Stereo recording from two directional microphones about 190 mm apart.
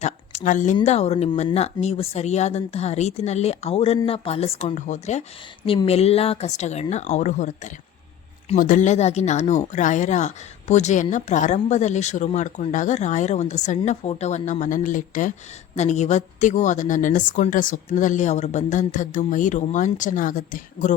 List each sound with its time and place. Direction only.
0.0 s speech: 40° left (ahead or behind)